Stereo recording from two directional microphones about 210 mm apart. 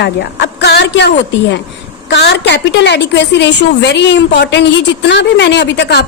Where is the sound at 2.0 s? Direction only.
55° left (ahead or behind).